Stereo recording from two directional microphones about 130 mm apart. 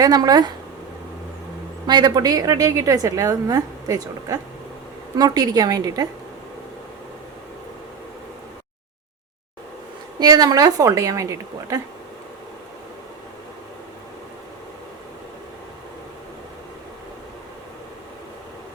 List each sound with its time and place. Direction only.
0.0 s a woman's voice: 30° right (ahead or behind)
1.9 s a woman's voice: 35° right (ahead or behind)
10.2 s a woman's voice: 30° right (ahead or behind)